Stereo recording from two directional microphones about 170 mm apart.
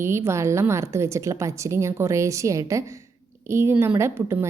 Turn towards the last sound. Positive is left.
turn(degrees=-15)  # may be behind; listen again after turning